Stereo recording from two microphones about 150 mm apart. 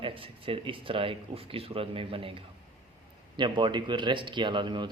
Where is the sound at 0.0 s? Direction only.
35° right (ahead or behind).